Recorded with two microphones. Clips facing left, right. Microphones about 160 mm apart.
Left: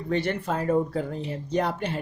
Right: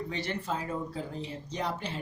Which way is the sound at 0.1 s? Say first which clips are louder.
Left 13 dB; 55° left (ahead or behind).